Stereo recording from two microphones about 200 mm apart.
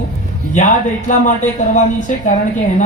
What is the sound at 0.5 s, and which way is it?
A man's voice, 40° left (ahead or behind).